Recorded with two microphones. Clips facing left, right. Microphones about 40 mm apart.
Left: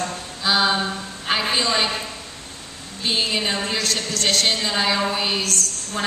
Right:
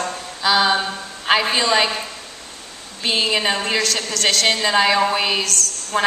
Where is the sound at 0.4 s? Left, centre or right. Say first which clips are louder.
Right 3 dB; right.